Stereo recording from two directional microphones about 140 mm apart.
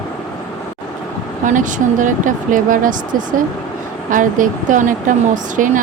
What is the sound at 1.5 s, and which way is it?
Speech, 65° right (ahead or behind).